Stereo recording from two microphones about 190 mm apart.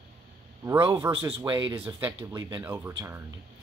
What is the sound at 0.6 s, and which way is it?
Speech, 15° right (ahead or behind).